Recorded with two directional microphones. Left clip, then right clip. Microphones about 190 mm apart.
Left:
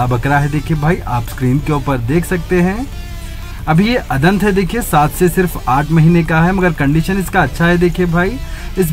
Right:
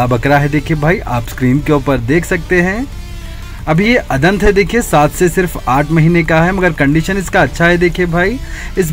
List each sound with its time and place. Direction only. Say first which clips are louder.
0.0 s speech: right 3 dB; 20° right (ahead or behind)